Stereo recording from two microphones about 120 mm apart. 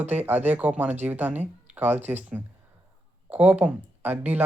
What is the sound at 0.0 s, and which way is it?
Speech, 15° right (ahead or behind).